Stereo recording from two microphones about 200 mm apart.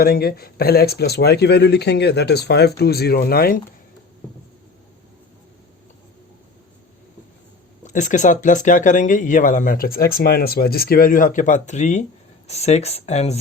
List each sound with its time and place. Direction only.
0.0 s speech: 50° left (ahead or behind)
7.9 s speech: 40° left (ahead or behind)